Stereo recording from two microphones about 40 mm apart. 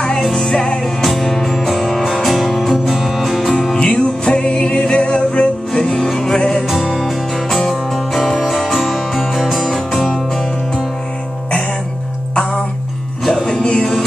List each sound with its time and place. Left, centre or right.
0.2 s music: centre
3.7 s music: centre
5.7 s music: centre
6.7 s music: centre
13.2 s music: centre
13.7 s music: centre